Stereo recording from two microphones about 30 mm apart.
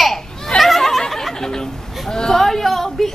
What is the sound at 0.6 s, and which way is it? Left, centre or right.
Snicker, centre.